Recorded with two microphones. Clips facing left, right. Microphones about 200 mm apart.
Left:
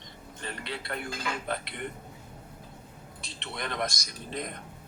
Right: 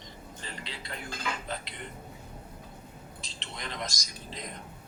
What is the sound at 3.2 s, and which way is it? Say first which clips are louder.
Speech: left 6 dB; 60° left (ahead or behind).